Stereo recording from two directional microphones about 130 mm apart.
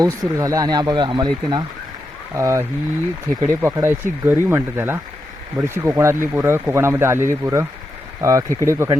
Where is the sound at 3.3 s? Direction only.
90° right.